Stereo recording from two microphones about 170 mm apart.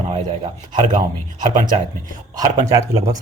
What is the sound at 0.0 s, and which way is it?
Speech, 40° right (ahead or behind).